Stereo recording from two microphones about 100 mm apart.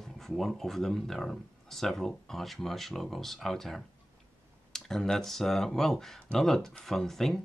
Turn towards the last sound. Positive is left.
turn(degrees=5)  # may be behind; listen again after turning